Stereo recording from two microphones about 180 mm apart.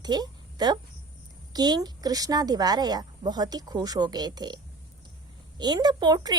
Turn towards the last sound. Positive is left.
turn(degrees=-25)  # may be behind; listen again after turning